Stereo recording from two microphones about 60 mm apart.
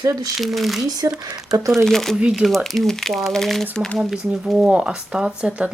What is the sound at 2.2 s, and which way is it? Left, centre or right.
Speech, centre.